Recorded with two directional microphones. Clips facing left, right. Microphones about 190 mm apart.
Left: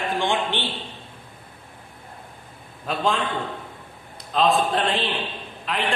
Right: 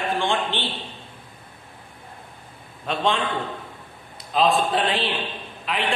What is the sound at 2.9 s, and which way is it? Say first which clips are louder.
Speech: even; centre (ahead or behind).